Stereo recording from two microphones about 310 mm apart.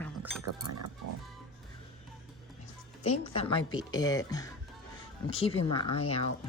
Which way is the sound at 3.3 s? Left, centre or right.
Centre.